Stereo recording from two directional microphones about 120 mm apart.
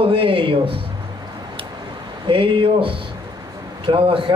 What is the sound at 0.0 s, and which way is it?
Speech, 50° right (ahead or behind).